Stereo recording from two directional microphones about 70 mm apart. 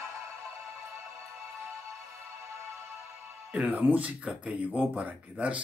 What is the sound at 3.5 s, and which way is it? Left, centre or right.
Speech, right.